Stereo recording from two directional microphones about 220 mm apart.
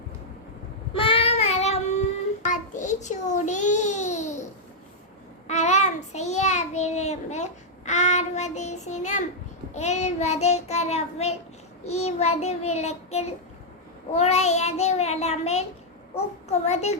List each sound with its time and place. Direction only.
0.9 s child singing: 25° left (ahead or behind)
2.4 s a sound: 35° left (ahead or behind)
5.5 s child singing: 30° left (ahead or behind)